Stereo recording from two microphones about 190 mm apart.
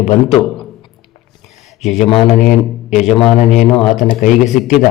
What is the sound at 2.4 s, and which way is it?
A man's voice, 40° left (ahead or behind).